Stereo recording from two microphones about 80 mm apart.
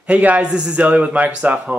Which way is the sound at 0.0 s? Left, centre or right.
Centre.